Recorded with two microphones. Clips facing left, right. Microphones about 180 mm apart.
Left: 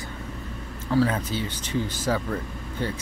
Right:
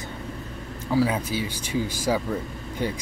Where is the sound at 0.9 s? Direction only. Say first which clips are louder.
Even; 10° right (ahead or behind).